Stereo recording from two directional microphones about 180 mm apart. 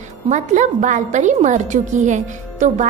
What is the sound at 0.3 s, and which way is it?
A woman's voice, 40° right (ahead or behind).